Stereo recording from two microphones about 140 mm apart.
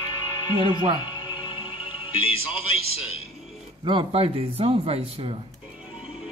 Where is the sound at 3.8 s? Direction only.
35° right (ahead or behind).